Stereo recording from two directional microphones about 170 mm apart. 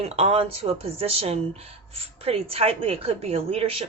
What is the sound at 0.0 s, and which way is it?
Speech, 35° right (ahead or behind).